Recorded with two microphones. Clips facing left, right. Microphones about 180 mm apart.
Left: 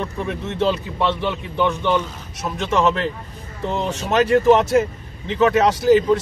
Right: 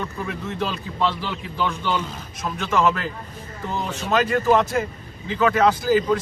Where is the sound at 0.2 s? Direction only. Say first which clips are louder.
Left 7 dB; 25° left (ahead or behind).